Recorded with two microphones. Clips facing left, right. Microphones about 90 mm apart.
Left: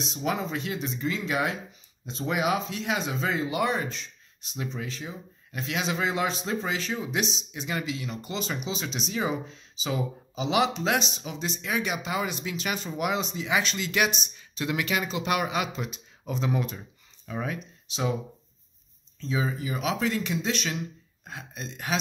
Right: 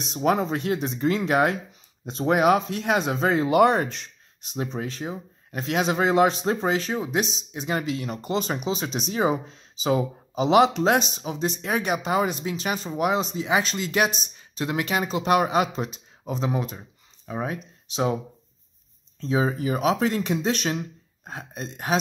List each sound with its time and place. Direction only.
0.0 s speech: 45° right (ahead or behind)
4.7 s speech: 45° right (ahead or behind); by 17.6 s 30° right (ahead or behind)
19.1 s speech: 40° right (ahead or behind)